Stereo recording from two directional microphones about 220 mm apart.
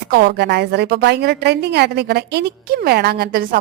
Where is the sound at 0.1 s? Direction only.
50° right (ahead or behind).